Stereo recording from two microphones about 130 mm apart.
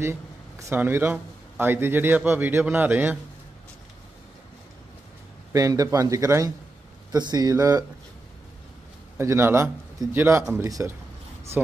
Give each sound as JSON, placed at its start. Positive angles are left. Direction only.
{"t": 0.0, "sound": "speech", "side_deg": -20}
{"t": 5.5, "sound": "a man's voice", "side_deg": -25}
{"t": 9.2, "sound": "a man's voice", "side_deg": -20}
{"t": 11.6, "sound": "speech", "side_deg": -10}